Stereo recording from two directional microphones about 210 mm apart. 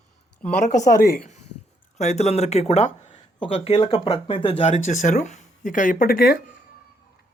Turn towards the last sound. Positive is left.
turn(degrees=45)  # may be behind; listen again after turning